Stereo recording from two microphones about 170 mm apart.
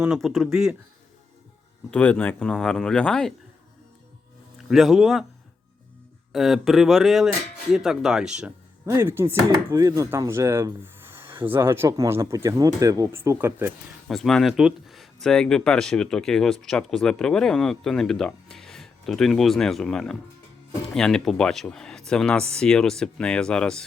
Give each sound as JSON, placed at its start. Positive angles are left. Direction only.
{"t": 0.0, "sound": "speech", "side_deg": 0}
{"t": 1.9, "sound": "speech", "side_deg": 10}
{"t": 4.5, "sound": "speech", "side_deg": 0}
{"t": 6.3, "sound": "speech", "side_deg": 0}
{"t": 14.1, "sound": "speech", "side_deg": 0}